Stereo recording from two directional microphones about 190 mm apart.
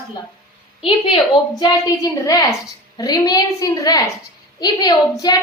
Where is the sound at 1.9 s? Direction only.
20° left (ahead or behind).